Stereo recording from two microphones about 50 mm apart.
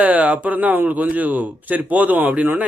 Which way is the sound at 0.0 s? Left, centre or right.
Right.